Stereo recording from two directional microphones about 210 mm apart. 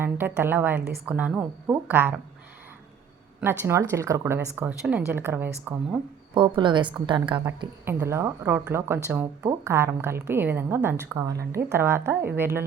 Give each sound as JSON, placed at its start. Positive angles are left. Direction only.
{"t": 0.0, "sound": "a woman's voice", "side_deg": -10}
{"t": 3.6, "sound": "a woman's voice", "side_deg": -15}
{"t": 6.3, "sound": "a woman's voice", "side_deg": -20}
{"t": 7.9, "sound": "a woman's voice", "side_deg": -10}